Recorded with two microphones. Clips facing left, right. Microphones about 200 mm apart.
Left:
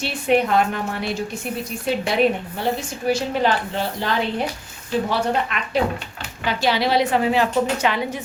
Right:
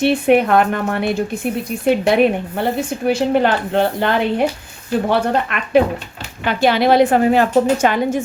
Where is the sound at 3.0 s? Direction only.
55° right (ahead or behind).